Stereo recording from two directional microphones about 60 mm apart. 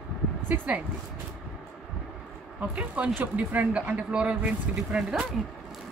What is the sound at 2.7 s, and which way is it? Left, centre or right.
Speech, right.